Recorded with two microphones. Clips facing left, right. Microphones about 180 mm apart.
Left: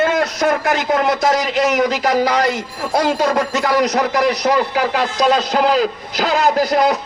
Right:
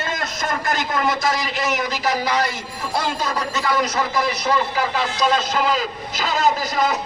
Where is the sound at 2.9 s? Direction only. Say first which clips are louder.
Left 8 dB; 65° left (ahead or behind).